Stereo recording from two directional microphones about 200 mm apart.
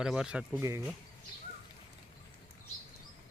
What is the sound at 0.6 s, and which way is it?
Speech, 15° right (ahead or behind).